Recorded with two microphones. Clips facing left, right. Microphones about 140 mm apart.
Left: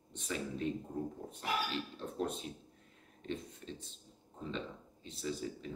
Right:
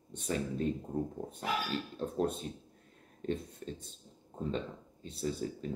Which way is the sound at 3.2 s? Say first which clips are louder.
Right 5 dB; 45° right (ahead or behind).